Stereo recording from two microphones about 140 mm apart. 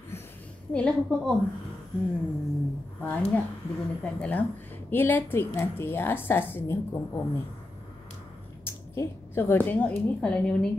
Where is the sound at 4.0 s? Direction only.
10° left (ahead or behind).